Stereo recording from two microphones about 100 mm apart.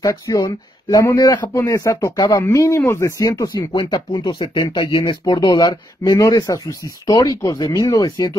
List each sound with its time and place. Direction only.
0.0 s speech: 30° left (ahead or behind)
2.1 s speech: 45° left (ahead or behind)
2.5 s speech: 30° left (ahead or behind); by 5.1 s 60° left (ahead or behind)
5.2 s speech: 40° left (ahead or behind)